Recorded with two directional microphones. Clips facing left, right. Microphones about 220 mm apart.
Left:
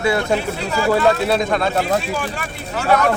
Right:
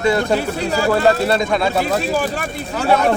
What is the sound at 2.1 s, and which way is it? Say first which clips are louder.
Speech: right 5 dB; 40° right (ahead or behind).